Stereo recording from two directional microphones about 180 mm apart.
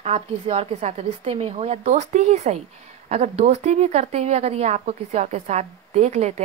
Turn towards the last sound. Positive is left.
turn(degrees=-35)  # may be behind; listen again after turning